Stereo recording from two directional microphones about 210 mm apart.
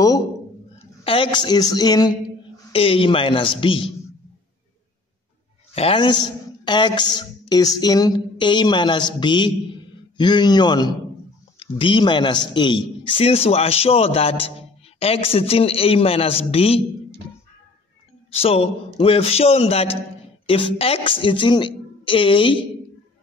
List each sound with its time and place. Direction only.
1.0 s speech: 25° left (ahead or behind)
5.8 s speech: 25° left (ahead or behind)
18.3 s speech: 25° left (ahead or behind)